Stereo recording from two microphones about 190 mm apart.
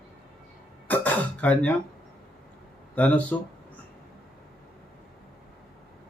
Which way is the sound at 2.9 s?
10° left (ahead or behind).